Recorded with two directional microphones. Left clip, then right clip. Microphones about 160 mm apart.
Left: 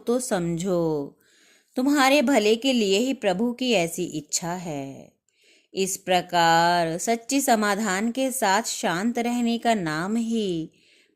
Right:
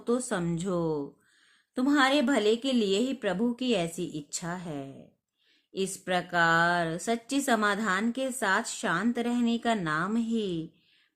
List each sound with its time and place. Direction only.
0.0 s a woman's voice: 30° left (ahead or behind)